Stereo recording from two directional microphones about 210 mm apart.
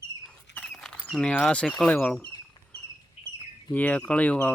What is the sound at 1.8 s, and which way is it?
Speech, 5° left (ahead or behind).